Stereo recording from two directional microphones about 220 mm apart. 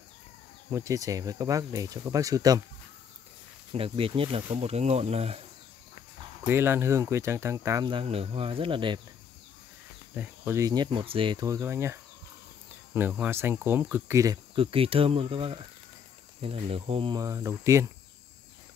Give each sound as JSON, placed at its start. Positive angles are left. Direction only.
{"t": 0.7, "sound": "speech", "side_deg": -15}
{"t": 3.7, "sound": "speech", "side_deg": -25}
{"t": 6.4, "sound": "speech", "side_deg": -10}
{"t": 10.1, "sound": "speech", "side_deg": -10}